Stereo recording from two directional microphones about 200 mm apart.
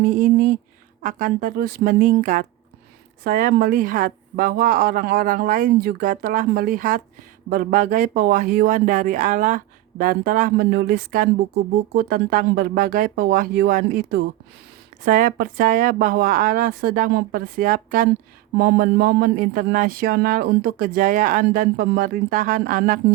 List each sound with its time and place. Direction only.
0.0 s speech: 40° right (ahead or behind)